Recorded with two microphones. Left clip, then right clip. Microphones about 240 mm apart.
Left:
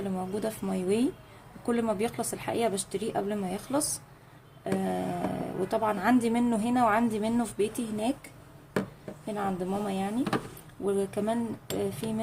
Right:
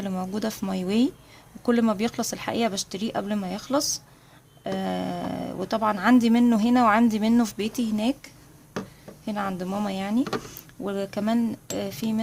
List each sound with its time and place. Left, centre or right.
0.0 s speech: right
9.2 s speech: right